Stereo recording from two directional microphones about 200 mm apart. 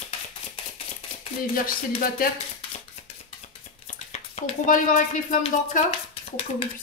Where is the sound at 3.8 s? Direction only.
35° left (ahead or behind).